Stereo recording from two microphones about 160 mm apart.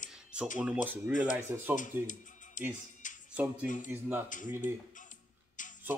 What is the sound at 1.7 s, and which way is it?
Speech, 55° left (ahead or behind).